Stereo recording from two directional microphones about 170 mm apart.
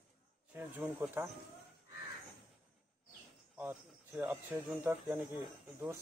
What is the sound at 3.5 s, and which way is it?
Speech, 10° right (ahead or behind).